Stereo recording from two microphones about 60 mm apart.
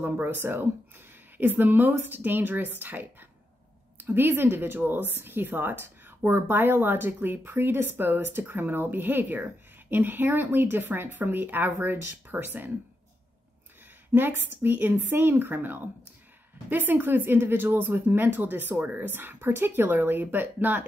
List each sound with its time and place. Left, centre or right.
0.0 s a woman's voice: right
14.1 s a woman's voice: right